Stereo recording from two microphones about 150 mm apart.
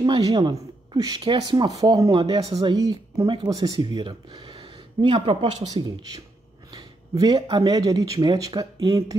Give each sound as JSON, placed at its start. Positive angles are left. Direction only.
{"t": 0.0, "sound": "speech", "side_deg": -30}